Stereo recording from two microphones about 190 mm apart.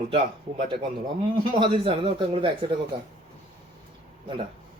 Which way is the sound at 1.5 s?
25° right (ahead or behind).